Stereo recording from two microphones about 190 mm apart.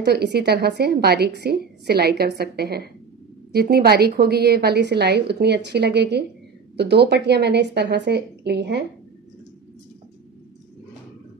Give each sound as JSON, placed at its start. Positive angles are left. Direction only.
{"t": 0.0, "sound": "speech", "side_deg": -60}